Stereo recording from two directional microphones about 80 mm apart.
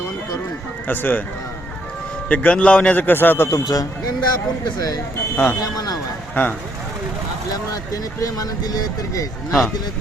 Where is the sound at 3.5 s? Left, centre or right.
Left.